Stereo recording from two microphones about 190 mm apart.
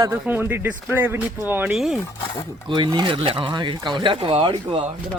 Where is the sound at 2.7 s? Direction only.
25° right (ahead or behind).